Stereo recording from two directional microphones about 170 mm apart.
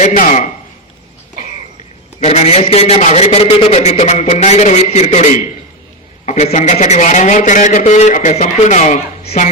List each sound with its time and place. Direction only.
0.0 s a man's voice: 45° left (ahead or behind)
2.2 s a man's voice: 40° left (ahead or behind)